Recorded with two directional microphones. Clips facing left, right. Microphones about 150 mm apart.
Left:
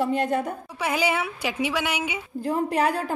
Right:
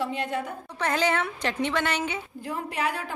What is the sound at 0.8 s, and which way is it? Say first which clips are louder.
A woman's voice: even; 10° left (ahead or behind).